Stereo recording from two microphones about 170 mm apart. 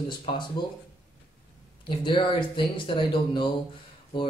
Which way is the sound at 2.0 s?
30° left (ahead or behind).